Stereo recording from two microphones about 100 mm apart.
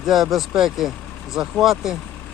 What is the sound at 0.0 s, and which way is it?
Speech, centre (ahead or behind).